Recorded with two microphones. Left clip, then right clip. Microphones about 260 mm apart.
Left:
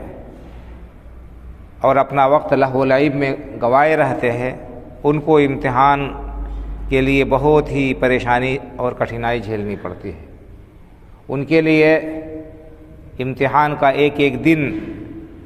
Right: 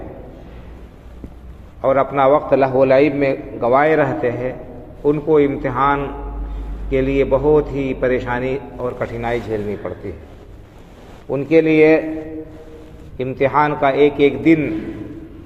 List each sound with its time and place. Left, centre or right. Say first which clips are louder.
1.8 s a man's voice: left 1 dB; left
11.3 s a man's voice: right 1 dB; left
13.1 s a man's voice: even; left